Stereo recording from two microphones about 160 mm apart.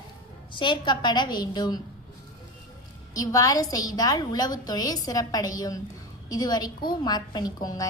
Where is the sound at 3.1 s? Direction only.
20° left (ahead or behind).